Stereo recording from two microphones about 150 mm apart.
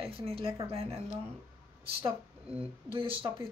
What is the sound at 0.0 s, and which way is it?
Speech, 40° right (ahead or behind).